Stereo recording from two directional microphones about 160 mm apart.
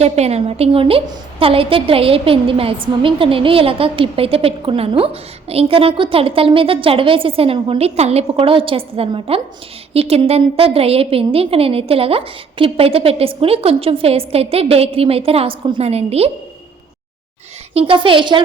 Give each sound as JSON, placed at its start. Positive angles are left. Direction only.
{"t": 0.0, "sound": "a woman's voice", "side_deg": -40}
{"t": 17.7, "sound": "a woman's voice", "side_deg": -35}